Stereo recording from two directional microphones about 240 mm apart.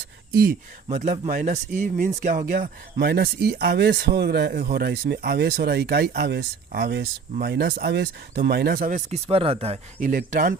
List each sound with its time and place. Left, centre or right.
0.3 s speech: right